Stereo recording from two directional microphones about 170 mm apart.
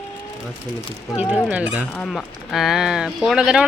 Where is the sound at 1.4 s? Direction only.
5° right (ahead or behind).